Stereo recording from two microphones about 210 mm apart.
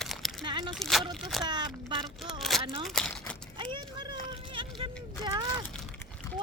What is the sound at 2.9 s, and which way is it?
Speech, 5° left (ahead or behind).